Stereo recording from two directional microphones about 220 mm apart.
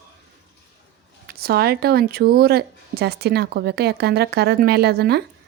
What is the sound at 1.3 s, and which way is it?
Speech, 45° right (ahead or behind).